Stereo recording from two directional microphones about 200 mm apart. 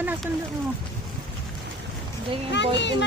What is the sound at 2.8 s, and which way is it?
Speech, 60° left (ahead or behind).